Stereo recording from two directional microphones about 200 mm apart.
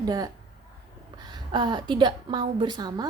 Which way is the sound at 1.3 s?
20° right (ahead or behind).